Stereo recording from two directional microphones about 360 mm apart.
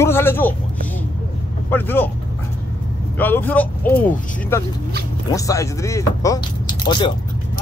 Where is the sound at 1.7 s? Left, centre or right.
Centre.